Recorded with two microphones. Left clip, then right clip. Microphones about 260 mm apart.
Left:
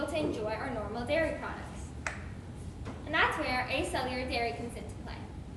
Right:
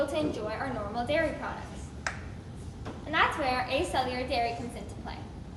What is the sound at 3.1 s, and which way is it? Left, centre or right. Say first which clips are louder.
A woman's voice: right 2 dB; centre.